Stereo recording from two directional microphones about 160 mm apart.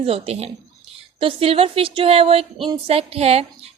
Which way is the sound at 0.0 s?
40° right (ahead or behind).